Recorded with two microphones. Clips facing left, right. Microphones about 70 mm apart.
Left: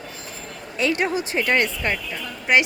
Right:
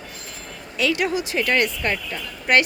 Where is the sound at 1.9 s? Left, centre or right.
Centre.